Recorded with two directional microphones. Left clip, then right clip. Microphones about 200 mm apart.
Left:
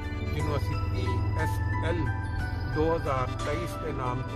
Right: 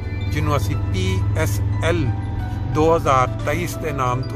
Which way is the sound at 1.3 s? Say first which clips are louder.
Right 6 dB; 15° right (ahead or behind).